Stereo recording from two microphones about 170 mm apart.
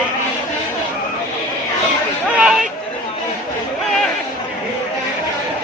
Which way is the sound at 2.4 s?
5° right (ahead or behind).